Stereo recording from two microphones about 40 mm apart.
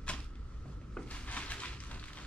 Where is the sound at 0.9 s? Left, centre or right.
Left.